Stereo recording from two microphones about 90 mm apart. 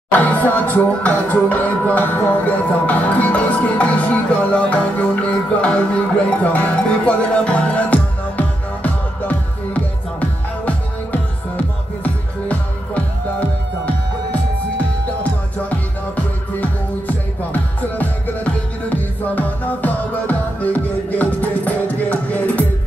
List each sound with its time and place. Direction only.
0.1 s music: 20° left (ahead or behind)
17.5 s music: 20° left (ahead or behind)